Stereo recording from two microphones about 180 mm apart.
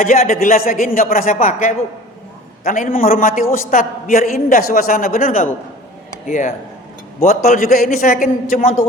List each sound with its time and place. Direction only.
0.0 s a man's voice: 45° left (ahead or behind)